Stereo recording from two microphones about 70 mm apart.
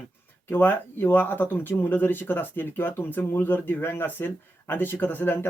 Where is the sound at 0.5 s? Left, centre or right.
Left.